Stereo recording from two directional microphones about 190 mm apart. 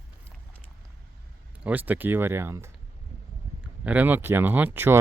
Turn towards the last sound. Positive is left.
turn(degrees=-10)  # may be behind; listen again after turning